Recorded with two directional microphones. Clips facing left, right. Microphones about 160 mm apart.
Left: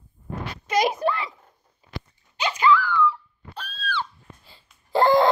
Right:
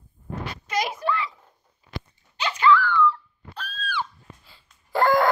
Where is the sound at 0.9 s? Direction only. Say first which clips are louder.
Left 2 dB; 40° left (ahead or behind).